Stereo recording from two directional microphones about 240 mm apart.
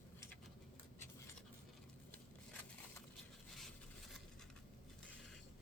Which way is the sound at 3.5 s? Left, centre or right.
Centre.